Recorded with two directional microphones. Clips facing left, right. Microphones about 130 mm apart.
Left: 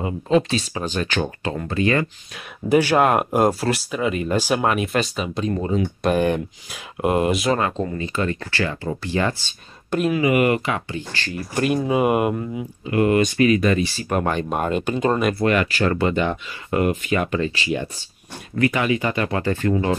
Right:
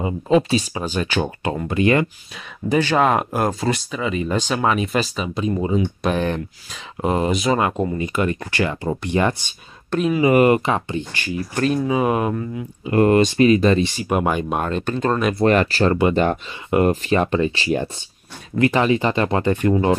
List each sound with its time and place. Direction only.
0.0 s speech: 10° right (ahead or behind)
2.3 s speech: 10° left (ahead or behind)
5.5 s speech: 10° right (ahead or behind)
5.8 s speech: centre (ahead or behind)
7.5 s speech: 15° right (ahead or behind)
9.8 s speech: 5° left (ahead or behind)
10.2 s speech: 30° right (ahead or behind)
11.5 s speech: 10° left (ahead or behind)
12.9 s speech: 35° right (ahead or behind)
14.0 s speech: 10° right (ahead or behind)
14.6 s speech: 10° left (ahead or behind)
15.4 s speech: 35° right (ahead or behind)